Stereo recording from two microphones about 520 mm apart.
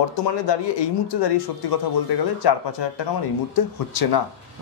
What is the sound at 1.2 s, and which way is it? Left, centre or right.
Speech, left.